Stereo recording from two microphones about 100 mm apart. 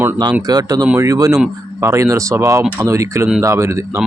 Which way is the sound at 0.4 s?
40° right (ahead or behind).